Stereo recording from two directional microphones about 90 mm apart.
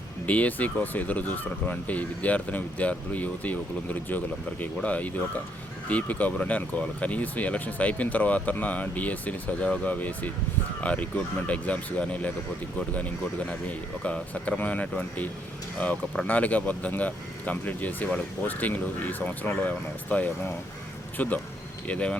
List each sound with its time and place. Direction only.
0.3 s speech: 15° left (ahead or behind)